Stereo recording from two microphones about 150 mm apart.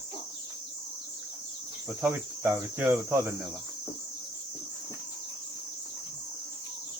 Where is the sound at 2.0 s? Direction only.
15° right (ahead or behind).